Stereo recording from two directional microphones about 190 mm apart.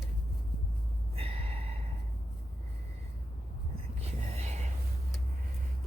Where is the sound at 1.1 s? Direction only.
30° right (ahead or behind).